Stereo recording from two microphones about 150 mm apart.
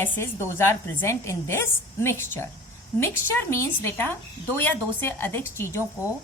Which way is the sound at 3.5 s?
15° left (ahead or behind).